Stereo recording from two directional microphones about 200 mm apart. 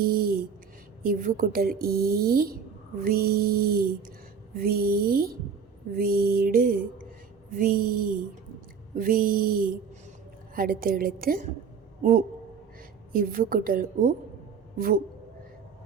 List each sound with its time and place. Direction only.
0.0 s a sound: 45° right (ahead or behind)
1.0 s a woman's voice: 45° right (ahead or behind)
13.1 s a woman's voice: 45° right (ahead or behind)